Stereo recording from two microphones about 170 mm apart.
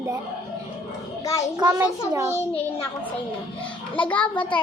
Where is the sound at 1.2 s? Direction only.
20° left (ahead or behind).